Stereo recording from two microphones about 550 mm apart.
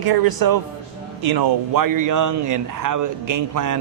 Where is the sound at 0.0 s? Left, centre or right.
Right.